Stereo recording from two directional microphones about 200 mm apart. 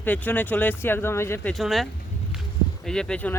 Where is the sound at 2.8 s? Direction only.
5° left (ahead or behind).